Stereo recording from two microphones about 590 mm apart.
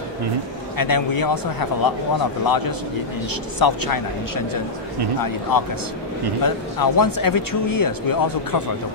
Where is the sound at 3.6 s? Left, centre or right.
Left.